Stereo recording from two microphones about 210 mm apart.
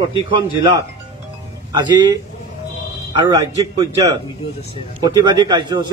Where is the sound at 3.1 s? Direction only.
20° right (ahead or behind).